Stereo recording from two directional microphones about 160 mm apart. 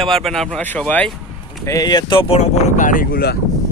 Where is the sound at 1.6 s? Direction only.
20° left (ahead or behind).